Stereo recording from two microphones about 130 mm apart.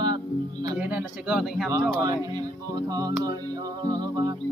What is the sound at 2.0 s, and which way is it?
Speech, 25° right (ahead or behind).